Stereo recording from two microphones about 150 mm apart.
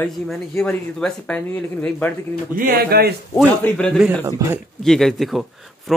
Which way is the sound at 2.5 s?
80° right.